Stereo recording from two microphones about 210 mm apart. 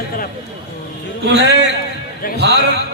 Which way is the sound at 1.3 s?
55° right (ahead or behind).